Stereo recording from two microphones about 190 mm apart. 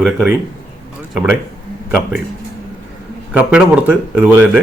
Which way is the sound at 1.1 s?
Centre (ahead or behind).